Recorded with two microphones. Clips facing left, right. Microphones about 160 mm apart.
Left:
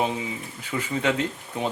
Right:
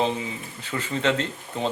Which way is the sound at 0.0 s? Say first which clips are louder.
Right 1 dB; 10° left (ahead or behind).